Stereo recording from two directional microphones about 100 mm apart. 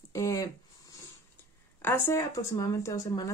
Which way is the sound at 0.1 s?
35° left (ahead or behind).